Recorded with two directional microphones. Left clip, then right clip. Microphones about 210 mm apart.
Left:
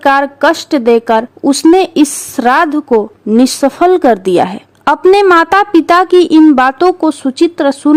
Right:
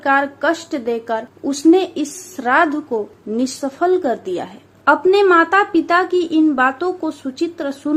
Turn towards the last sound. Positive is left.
turn(degrees=50)  # may be behind; listen again after turning